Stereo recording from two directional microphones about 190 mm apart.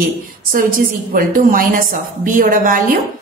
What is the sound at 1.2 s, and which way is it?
A woman's voice, 45° right (ahead or behind).